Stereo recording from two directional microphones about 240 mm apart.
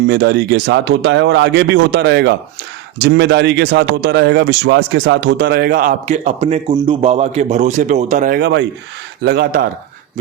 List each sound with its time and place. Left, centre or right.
0.1 s speech: right